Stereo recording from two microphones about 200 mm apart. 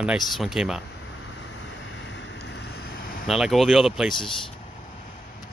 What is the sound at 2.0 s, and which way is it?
Vehicle, 65° left (ahead or behind).